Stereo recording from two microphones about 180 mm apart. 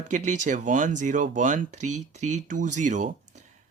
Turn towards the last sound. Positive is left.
turn(degrees=-45)  # may be behind; listen again after turning